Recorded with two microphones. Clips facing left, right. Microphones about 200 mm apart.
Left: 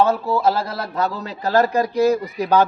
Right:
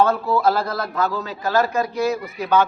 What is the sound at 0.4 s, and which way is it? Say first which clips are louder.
A man's voice: even; 25° left (ahead or behind).